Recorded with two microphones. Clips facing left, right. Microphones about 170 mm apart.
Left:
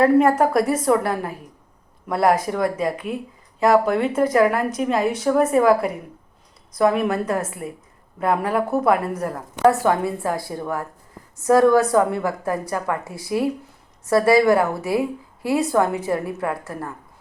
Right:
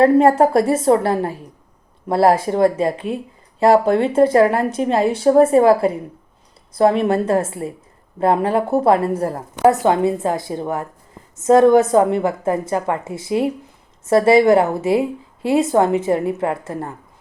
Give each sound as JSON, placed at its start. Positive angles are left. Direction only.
{"t": 0.0, "sound": "a woman's voice", "side_deg": -30}